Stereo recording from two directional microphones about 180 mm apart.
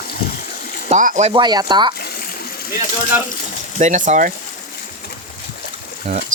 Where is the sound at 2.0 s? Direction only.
60° left (ahead or behind).